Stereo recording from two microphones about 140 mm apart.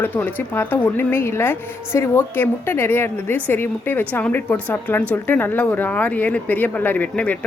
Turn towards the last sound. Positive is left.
turn(degrees=10)  # may be behind; listen again after turning